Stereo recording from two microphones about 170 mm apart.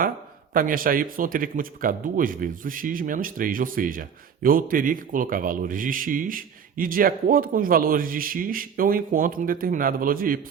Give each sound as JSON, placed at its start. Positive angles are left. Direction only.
{"t": 0.5, "sound": "a man's voice", "side_deg": -55}